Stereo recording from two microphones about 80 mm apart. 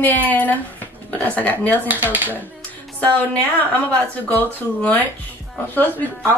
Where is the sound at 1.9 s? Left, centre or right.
Right.